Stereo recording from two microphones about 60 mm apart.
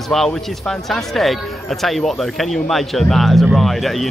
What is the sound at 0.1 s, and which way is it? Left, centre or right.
A man's voice, centre.